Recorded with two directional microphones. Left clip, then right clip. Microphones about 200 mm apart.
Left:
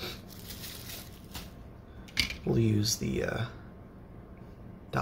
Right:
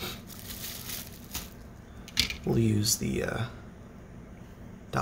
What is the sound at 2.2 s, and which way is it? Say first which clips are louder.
Speech: right 2 dB; 5° right (ahead or behind).